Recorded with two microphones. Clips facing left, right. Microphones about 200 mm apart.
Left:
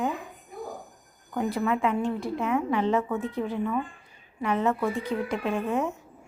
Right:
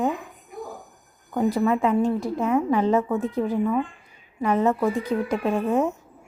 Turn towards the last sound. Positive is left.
turn(degrees=-40)  # may be behind; listen again after turning